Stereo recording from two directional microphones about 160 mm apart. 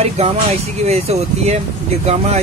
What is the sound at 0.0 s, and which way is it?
Speech, 40° right (ahead or behind).